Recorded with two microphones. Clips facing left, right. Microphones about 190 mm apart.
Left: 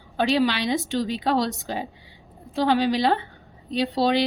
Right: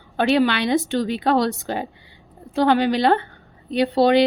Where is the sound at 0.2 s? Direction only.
60° right (ahead or behind).